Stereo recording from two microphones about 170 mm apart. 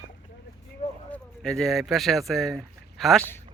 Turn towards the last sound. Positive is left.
turn(degrees=0)  # may be behind; listen again after turning